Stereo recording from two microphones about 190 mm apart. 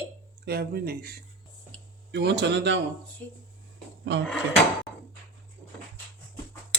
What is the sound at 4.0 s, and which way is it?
Speech, 70° right (ahead or behind).